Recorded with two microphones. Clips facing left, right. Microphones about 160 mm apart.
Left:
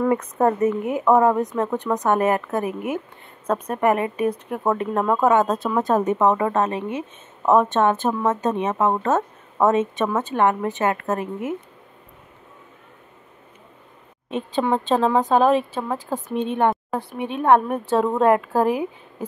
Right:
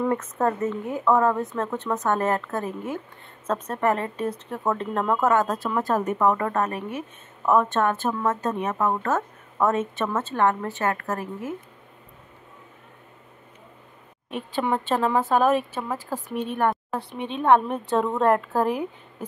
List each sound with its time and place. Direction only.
0.1 s a woman's voice: 15° left (ahead or behind)
14.3 s speech: 20° left (ahead or behind)
17.1 s a woman's voice: 10° left (ahead or behind)